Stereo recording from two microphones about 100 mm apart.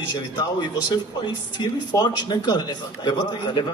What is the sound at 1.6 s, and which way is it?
A man's voice, 45° left (ahead or behind).